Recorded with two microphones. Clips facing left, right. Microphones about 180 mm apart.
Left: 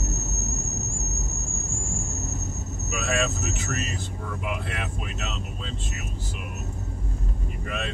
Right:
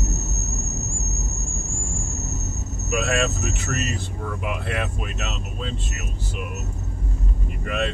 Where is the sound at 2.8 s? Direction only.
65° right (ahead or behind).